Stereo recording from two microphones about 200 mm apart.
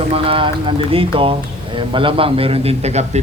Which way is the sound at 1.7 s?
25° right (ahead or behind).